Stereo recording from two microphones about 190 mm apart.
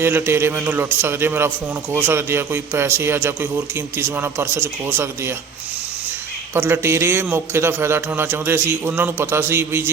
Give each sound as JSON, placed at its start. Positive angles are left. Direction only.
{"t": 0.0, "sound": "a man's voice", "side_deg": -10}
{"t": 6.5, "sound": "a man's voice", "side_deg": -10}